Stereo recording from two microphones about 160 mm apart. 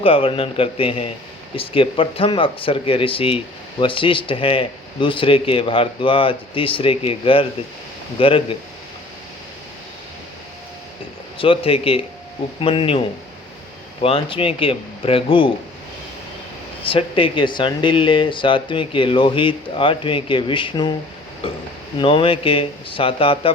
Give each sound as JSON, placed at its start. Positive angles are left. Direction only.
{"t": 0.0, "sound": "speech", "side_deg": 35}
{"t": 11.3, "sound": "speech", "side_deg": 35}
{"t": 14.0, "sound": "speech", "side_deg": 35}
{"t": 16.8, "sound": "speech", "side_deg": 35}